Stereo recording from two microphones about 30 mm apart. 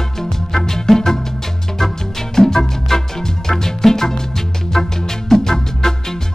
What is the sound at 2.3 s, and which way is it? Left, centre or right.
Music, centre.